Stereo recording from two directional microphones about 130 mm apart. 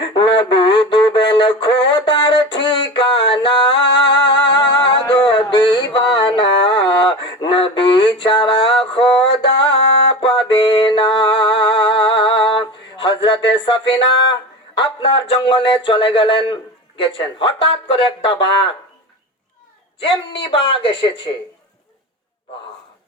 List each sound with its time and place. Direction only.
0.1 s a sound: 35° left (ahead or behind)
5.5 s mantra: 35° left (ahead or behind)
14.8 s speech: 40° left (ahead or behind)
20.0 s speech: 40° left (ahead or behind)